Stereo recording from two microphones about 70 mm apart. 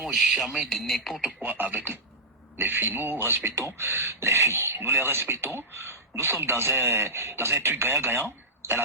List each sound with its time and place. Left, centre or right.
0.0 s speech: centre
1.4 s a man's voice: right